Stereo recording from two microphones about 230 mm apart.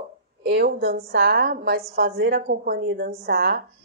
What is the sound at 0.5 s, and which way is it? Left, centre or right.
A woman's voice, right.